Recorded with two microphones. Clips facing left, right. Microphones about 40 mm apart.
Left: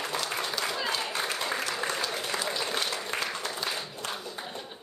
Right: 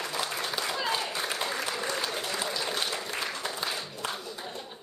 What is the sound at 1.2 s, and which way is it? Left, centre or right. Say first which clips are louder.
Applause: even; centre.